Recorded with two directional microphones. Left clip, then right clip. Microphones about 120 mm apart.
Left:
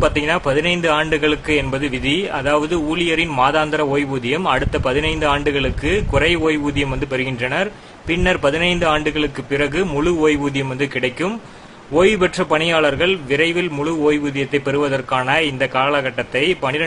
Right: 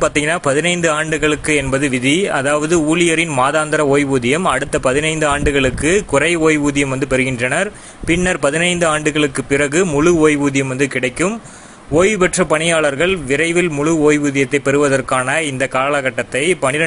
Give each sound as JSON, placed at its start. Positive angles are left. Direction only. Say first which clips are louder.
{"t": 0.0, "sound": "speech", "louder": "right 2 dB", "side_deg": -40}